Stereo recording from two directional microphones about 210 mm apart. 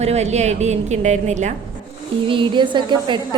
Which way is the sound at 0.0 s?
30° right (ahead or behind).